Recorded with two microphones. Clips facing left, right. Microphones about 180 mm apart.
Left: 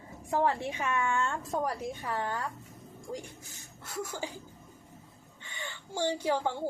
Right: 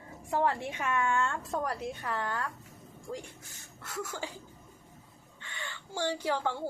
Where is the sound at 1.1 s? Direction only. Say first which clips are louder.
Even; 20° left (ahead or behind).